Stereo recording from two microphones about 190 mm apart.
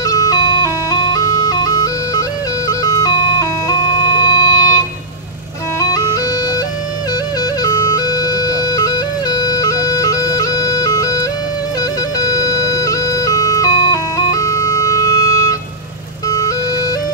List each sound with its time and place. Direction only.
0.0 s ice cream truck: 20° left (ahead or behind)
2.7 s music: 20° left (ahead or behind)
7.6 s ice cream truck: 20° left (ahead or behind)
12.2 s music: 20° left (ahead or behind)
16.3 s ice cream truck: 20° left (ahead or behind)